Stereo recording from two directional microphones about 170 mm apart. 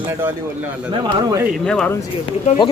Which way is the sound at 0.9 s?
25° right (ahead or behind).